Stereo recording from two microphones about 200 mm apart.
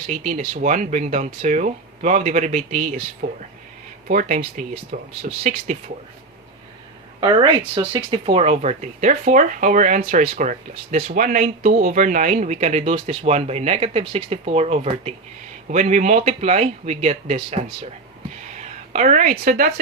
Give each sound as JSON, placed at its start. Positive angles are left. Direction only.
{"t": 0.1, "sound": "speech", "side_deg": -35}
{"t": 7.8, "sound": "a woman's voice", "side_deg": -25}